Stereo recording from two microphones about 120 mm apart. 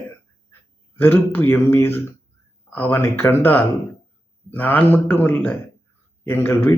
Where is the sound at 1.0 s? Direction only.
15° left (ahead or behind).